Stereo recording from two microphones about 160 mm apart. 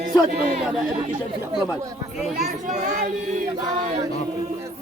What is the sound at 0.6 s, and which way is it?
Speech, 5° right (ahead or behind).